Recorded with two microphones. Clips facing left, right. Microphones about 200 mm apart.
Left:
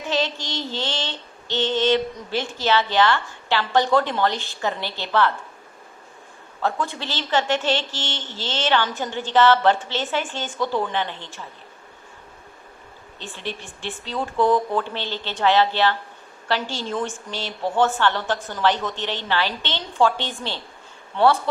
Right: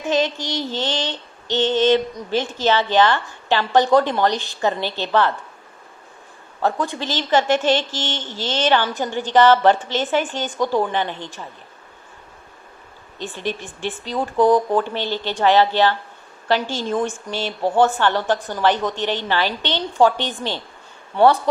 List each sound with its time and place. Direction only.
0.2 s mantra: 15° right (ahead or behind)
6.6 s mantra: 15° right (ahead or behind)
13.1 s mantra: 15° right (ahead or behind)